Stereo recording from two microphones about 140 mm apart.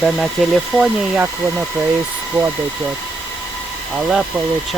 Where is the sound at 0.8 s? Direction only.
10° right (ahead or behind).